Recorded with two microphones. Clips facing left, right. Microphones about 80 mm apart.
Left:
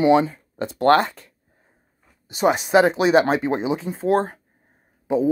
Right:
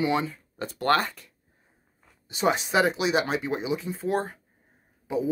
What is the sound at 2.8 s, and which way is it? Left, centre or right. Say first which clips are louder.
Speech: left 8 dB; left.